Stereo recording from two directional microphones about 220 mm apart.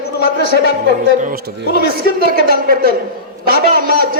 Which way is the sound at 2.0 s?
45° right (ahead or behind).